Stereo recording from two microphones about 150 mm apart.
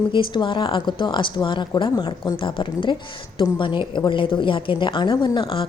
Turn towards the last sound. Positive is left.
turn(degrees=35)  # may be behind; listen again after turning